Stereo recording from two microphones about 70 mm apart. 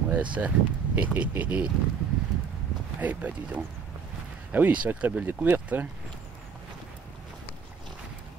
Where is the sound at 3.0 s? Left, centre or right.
Right.